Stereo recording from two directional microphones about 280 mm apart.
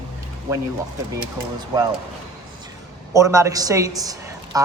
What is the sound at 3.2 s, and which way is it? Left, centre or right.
Speech, centre.